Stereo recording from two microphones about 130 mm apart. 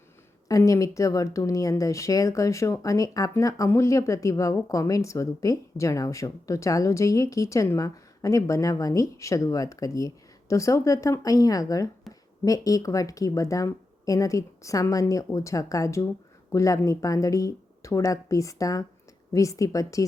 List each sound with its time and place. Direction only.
0.4 s speech: 25° left (ahead or behind)
12.1 s a sound: centre (ahead or behind)
12.5 s speech: 25° left (ahead or behind)